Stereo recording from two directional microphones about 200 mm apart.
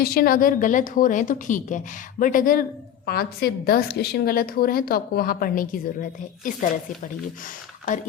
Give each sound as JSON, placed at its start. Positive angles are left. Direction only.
{"t": 0.0, "sound": "a woman's voice", "side_deg": 50}